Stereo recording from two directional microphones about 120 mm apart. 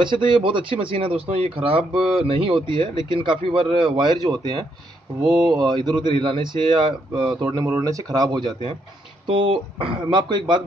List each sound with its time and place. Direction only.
0.0 s speech: 40° right (ahead or behind)
7.5 s speech: 25° right (ahead or behind)
9.3 s speech: 50° right (ahead or behind)